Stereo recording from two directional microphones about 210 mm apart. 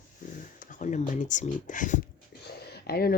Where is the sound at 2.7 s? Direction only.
50° left (ahead or behind).